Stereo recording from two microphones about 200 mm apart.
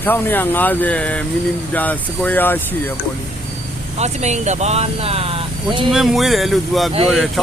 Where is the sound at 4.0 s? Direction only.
35° right (ahead or behind).